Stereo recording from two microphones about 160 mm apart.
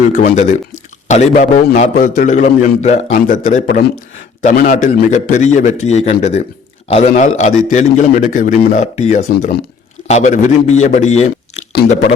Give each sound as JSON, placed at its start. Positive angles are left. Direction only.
{"t": 0.1, "sound": "a man's voice", "side_deg": 50}